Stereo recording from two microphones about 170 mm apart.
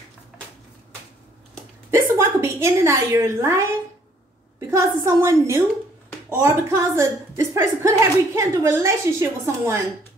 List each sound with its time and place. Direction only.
1.9 s a woman's voice: 15° right (ahead or behind)